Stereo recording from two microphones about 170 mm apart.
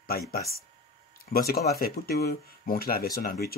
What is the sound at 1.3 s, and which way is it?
Speech, 65° left (ahead or behind).